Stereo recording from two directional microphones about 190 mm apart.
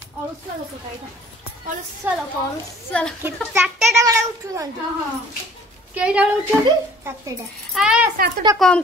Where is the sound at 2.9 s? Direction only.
5° left (ahead or behind).